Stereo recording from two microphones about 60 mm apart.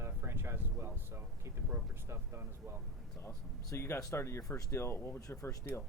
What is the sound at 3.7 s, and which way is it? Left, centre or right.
Speech, left.